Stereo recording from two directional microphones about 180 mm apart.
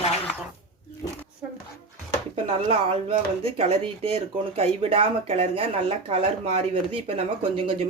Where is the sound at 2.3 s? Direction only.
30° right (ahead or behind).